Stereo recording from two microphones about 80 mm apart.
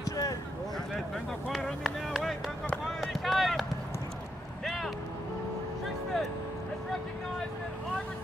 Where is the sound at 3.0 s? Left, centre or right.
Centre.